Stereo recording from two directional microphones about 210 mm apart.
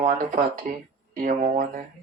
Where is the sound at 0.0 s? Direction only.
40° right (ahead or behind).